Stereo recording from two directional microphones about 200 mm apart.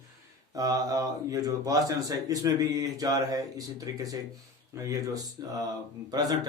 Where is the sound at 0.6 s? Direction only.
20° right (ahead or behind).